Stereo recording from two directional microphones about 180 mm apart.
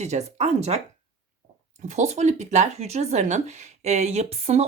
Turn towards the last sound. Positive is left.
turn(degrees=-35)  # may be behind; listen again after turning